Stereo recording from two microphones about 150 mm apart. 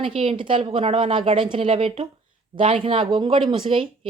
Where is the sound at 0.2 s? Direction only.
35° right (ahead or behind).